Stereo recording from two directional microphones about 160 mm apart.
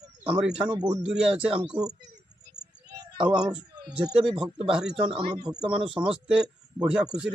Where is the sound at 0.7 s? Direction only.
25° right (ahead or behind).